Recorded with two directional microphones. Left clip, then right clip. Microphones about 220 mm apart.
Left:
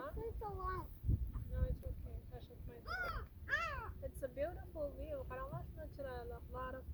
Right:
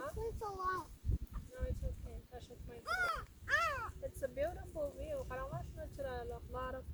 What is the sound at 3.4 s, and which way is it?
Crow, 20° right (ahead or behind).